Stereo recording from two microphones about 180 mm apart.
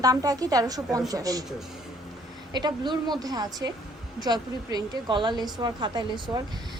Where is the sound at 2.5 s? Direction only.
25° right (ahead or behind).